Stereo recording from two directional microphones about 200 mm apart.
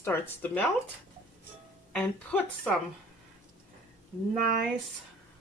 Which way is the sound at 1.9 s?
5° left (ahead or behind).